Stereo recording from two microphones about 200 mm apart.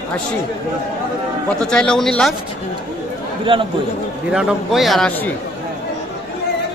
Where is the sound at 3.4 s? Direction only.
25° right (ahead or behind).